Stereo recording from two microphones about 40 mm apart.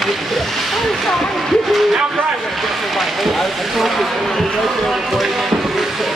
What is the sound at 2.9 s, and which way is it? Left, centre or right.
Speech, centre.